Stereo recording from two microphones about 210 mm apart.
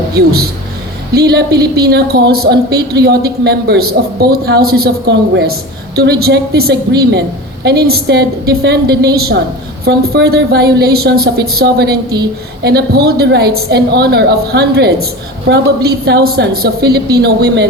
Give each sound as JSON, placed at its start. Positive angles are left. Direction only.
{"t": 0.1, "sound": "a woman's voice", "side_deg": -50}